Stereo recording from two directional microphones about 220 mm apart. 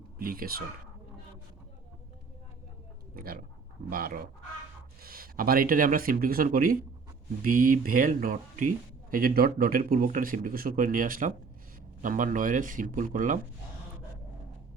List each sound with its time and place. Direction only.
0.2 s speech: 40° right (ahead or behind)
3.2 s speech: 40° right (ahead or behind)